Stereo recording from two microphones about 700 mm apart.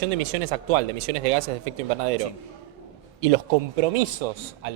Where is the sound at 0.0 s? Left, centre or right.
Right.